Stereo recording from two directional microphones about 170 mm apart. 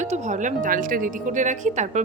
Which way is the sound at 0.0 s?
45° right (ahead or behind).